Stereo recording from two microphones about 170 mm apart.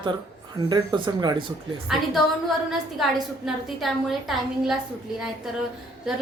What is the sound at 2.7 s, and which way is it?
A woman's voice, centre (ahead or behind).